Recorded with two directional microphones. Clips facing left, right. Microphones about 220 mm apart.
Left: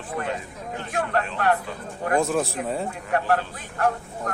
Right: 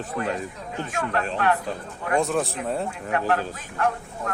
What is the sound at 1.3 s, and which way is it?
Speech, 40° left (ahead or behind).